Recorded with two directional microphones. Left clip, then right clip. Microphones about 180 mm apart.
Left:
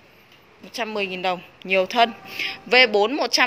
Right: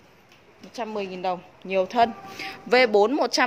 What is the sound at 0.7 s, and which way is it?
A woman's voice, centre (ahead or behind).